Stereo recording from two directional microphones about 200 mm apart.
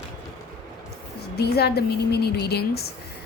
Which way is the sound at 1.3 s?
55° left (ahead or behind).